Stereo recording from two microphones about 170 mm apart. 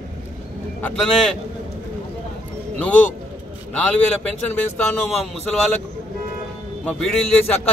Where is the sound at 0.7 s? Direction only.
10° left (ahead or behind).